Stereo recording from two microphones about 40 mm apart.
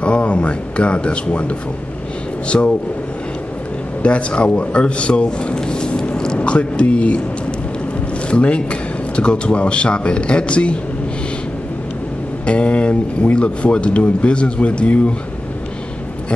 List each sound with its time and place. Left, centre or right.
0.0 s speech: left
2.4 s speech: left
4.0 s speech: left
8.3 s speech: left
12.4 s speech: left